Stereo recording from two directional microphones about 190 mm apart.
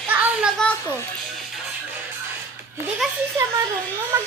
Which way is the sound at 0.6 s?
5° left (ahead or behind).